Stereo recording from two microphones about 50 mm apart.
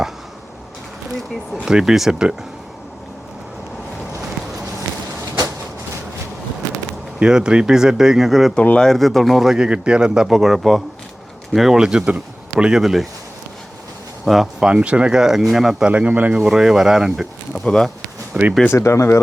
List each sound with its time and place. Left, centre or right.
1.6 s speech: centre
7.2 s speech: centre
8.8 s speech: centre
10.2 s a man's voice: centre
12.8 s speech: centre
14.3 s a man's voice: centre
14.6 s speech: right
15.9 s speech: right
16.4 s speech: centre
17.5 s speech: centre
18.3 s speech: right
18.7 s speech: left